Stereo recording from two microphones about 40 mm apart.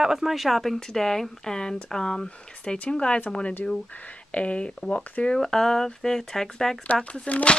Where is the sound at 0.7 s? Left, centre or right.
Centre.